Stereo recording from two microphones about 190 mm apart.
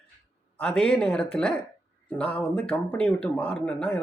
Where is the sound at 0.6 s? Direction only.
5° left (ahead or behind).